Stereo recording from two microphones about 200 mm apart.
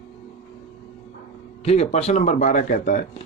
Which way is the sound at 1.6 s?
30° left (ahead or behind).